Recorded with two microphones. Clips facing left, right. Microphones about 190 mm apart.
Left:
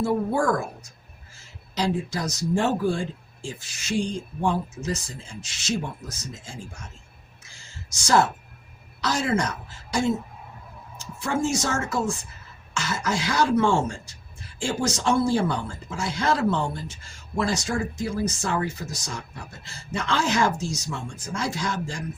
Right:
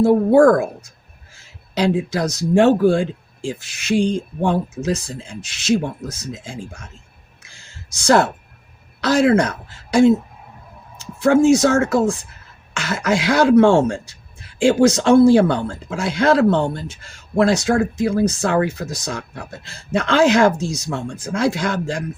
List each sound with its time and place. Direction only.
0.0 s speech: 70° right (ahead or behind)
8.0 s speech: 65° right (ahead or behind)
11.2 s speech: 70° right (ahead or behind)